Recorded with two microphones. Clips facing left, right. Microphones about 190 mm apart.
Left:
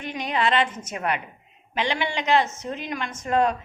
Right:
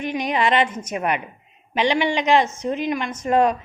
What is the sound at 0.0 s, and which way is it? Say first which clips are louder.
A woman's voice: right 4 dB; 15° right (ahead or behind).